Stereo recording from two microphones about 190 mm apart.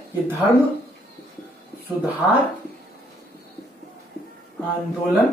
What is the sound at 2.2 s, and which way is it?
Speech, 5° left (ahead or behind).